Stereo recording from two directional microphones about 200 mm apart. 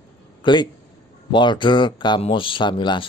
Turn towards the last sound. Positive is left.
turn(degrees=25)  # may be behind; listen again after turning